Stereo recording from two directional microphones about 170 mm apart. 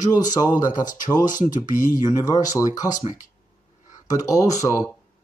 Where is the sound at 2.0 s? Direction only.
20° left (ahead or behind).